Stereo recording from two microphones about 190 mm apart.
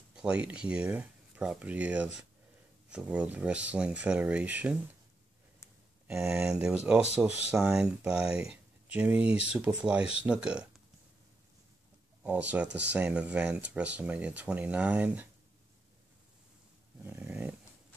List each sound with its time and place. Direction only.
0.1 s speech: 5° right (ahead or behind)
6.0 s speech: 5° right (ahead or behind)
12.6 s speech: 65° right (ahead or behind)
12.9 s speech: 5° right (ahead or behind)
17.0 s dog: 10° right (ahead or behind)